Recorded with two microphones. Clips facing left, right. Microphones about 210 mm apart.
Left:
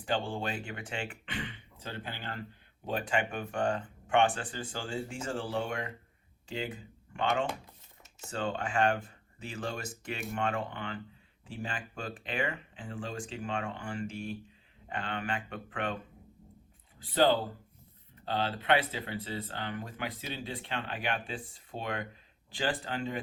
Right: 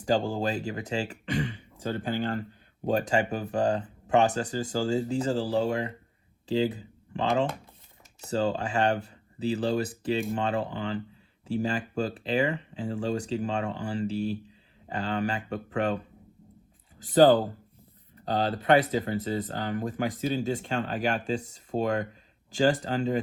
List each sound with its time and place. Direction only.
0.0 s speech: 40° right (ahead or behind)
17.0 s speech: 45° right (ahead or behind)